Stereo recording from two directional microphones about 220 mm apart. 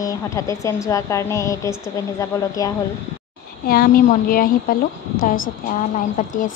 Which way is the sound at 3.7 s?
40° left (ahead or behind).